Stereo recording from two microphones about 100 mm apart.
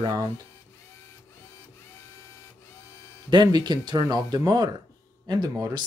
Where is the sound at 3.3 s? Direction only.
45° right (ahead or behind).